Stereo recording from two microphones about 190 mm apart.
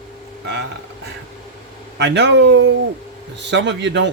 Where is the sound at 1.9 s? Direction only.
65° right (ahead or behind).